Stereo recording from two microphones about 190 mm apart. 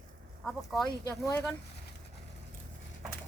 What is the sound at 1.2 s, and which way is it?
Speech, 15° left (ahead or behind).